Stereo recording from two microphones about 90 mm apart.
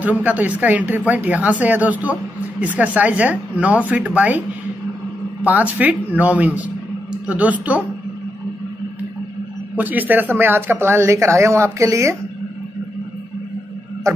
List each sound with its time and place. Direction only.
0.2 s speech: 15° right (ahead or behind)
5.4 s speech: 20° right (ahead or behind)
9.8 s speech: 20° right (ahead or behind)